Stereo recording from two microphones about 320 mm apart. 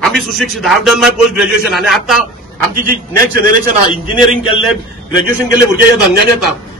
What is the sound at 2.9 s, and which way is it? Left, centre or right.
Speech, right.